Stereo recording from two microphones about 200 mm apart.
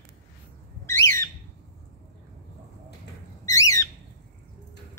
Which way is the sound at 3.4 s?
15° left (ahead or behind).